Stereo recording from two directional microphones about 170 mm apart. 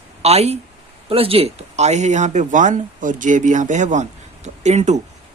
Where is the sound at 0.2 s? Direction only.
40° right (ahead or behind).